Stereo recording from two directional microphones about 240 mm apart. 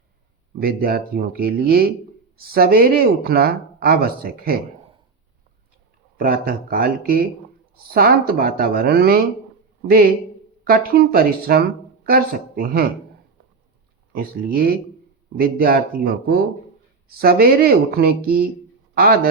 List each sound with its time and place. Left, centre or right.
0.6 s speech: right
6.1 s speech: right
10.6 s speech: right
14.1 s speech: right